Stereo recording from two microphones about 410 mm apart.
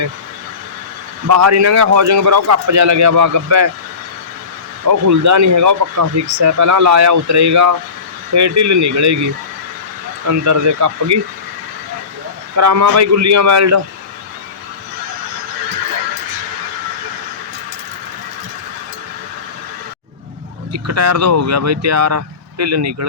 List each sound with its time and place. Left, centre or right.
1.3 s speech: right
4.9 s speech: right
12.5 s speech: right
20.7 s speech: right